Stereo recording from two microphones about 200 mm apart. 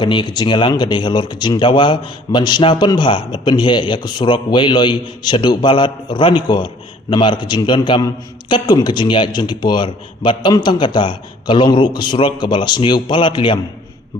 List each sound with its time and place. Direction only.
0.0 s a man's voice: 25° left (ahead or behind)